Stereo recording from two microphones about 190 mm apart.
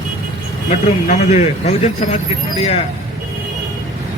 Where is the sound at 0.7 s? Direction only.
35° left (ahead or behind).